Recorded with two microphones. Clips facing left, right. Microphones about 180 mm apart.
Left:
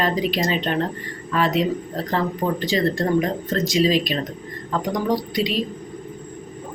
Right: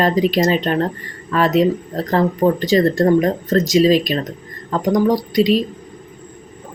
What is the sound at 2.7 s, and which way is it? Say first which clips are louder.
Speech: right 6 dB; 40° right (ahead or behind).